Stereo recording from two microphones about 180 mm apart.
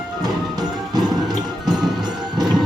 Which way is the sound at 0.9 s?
20° right (ahead or behind).